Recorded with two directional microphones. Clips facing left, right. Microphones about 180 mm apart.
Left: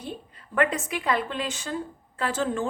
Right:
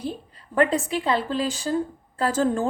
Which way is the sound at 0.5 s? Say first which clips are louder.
Right 4 dB; 30° right (ahead or behind).